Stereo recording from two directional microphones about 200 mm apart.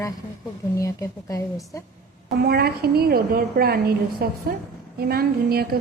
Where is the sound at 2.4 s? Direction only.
50° right (ahead or behind).